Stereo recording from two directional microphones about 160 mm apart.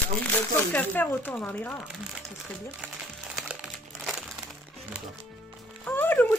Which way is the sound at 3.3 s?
Centre (ahead or behind).